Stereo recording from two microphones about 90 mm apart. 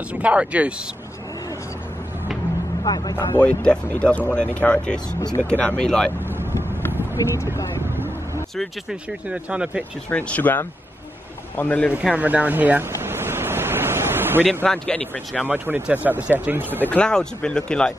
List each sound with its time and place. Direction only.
0.1 s speech: 15° right (ahead or behind)
2.8 s speech: 50° left (ahead or behind)
3.3 s speech: 15° left (ahead or behind)
7.2 s speech: 40° left (ahead or behind)
9.3 s speech: 10° right (ahead or behind)
10.0 s speech: 15° left (ahead or behind)
12.0 s waves: 15° right (ahead or behind)
14.5 s speech: 15° left (ahead or behind)
15.4 s speech: 20° right (ahead or behind)
16.8 s speech: 15° left (ahead or behind)